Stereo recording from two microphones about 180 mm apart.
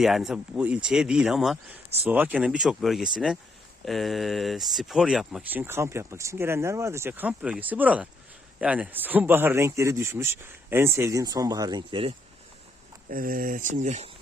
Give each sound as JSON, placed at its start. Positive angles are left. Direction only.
{"t": 0.0, "sound": "speech", "side_deg": 0}
{"t": 13.1, "sound": "speech", "side_deg": -50}